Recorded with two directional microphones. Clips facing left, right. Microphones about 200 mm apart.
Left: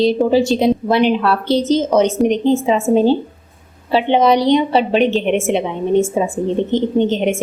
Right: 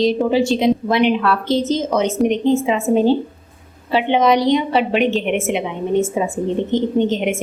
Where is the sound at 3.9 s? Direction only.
30° left (ahead or behind).